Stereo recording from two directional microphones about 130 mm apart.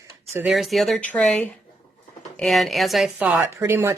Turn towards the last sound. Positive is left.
turn(degrees=-20)  # may be behind; listen again after turning